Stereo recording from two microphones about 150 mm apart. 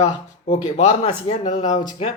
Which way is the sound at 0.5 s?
50° left (ahead or behind).